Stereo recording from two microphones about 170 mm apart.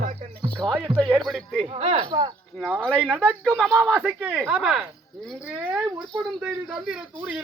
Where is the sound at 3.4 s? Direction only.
5° left (ahead or behind).